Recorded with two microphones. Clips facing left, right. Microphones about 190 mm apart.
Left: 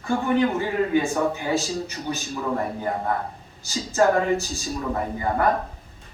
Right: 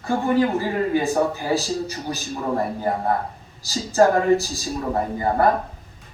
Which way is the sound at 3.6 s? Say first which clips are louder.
Right 3 dB; 35° right (ahead or behind).